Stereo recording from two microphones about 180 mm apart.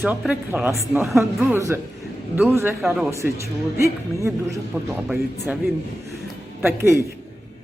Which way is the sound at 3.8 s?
15° right (ahead or behind).